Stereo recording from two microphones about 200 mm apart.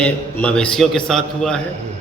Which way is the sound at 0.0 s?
5° left (ahead or behind).